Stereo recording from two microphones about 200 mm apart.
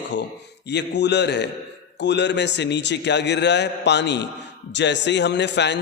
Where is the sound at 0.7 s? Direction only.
60° left (ahead or behind).